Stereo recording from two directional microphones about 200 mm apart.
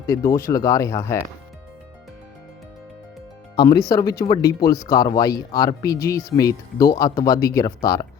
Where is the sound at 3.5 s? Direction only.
20° left (ahead or behind).